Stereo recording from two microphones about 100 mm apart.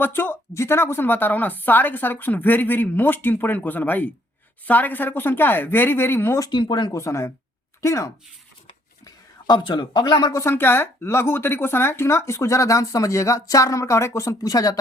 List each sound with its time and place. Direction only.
0.0 s speech: 20° left (ahead or behind)
6.5 s speech: 50° left (ahead or behind)
6.9 s speech: 30° left (ahead or behind)
9.6 s speech: 50° left (ahead or behind)
10.3 s speech: 25° left (ahead or behind)